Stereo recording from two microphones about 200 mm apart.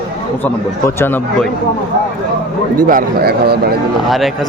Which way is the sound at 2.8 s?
45° right (ahead or behind).